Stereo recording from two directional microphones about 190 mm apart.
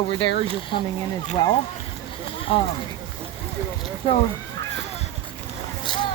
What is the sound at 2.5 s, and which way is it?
Speech, 30° left (ahead or behind).